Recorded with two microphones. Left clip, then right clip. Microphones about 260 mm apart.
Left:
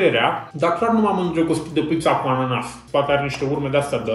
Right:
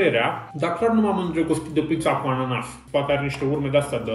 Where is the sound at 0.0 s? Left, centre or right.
Centre.